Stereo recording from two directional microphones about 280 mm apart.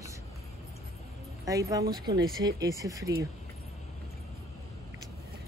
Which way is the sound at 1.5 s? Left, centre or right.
Centre.